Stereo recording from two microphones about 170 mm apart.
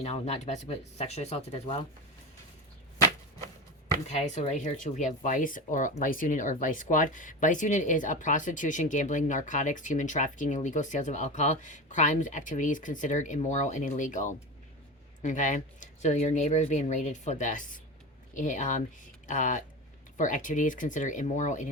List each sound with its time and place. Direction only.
0.0 s speech: 40° left (ahead or behind)
4.1 s speech: 40° left (ahead or behind)